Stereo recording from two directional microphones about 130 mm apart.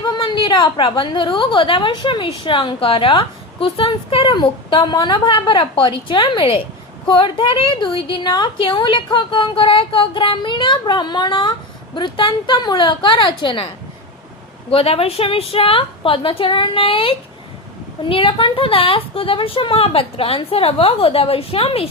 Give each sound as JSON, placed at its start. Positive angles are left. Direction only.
{"t": 0.0, "sound": "a woman's voice", "side_deg": 35}
{"t": 14.7, "sound": "speech", "side_deg": 45}